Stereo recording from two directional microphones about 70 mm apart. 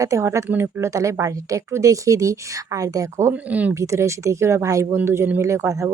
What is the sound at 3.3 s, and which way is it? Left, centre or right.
Speech, right.